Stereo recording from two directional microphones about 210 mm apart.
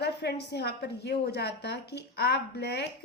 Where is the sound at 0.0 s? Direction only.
55° left (ahead or behind).